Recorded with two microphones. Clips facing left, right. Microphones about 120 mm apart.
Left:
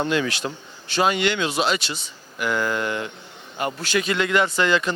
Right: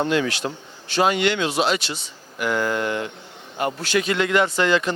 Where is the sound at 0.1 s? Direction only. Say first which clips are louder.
Right 1 dB; 50° right (ahead or behind).